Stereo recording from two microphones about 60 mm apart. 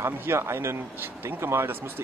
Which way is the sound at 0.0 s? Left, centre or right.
Right.